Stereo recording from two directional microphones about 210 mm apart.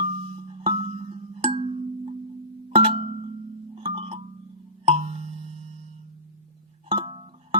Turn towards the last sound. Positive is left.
turn(degrees=-25)  # may be behind; listen again after turning